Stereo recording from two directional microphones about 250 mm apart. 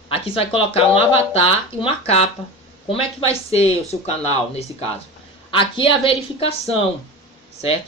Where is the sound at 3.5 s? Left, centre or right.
Left.